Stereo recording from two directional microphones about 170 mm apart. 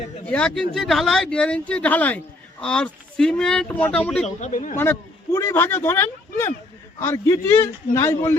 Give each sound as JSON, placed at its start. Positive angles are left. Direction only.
{"t": 0.3, "sound": "speech", "side_deg": 5}
{"t": 4.4, "sound": "speech", "side_deg": 45}
{"t": 4.8, "sound": "speech", "side_deg": 15}